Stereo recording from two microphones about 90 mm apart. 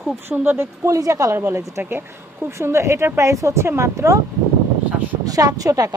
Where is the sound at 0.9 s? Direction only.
40° right (ahead or behind).